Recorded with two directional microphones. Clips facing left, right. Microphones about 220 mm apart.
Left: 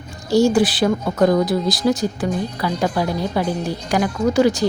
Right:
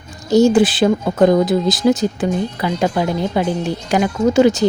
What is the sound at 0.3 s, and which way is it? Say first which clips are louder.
Speech: right 3 dB; 20° right (ahead or behind).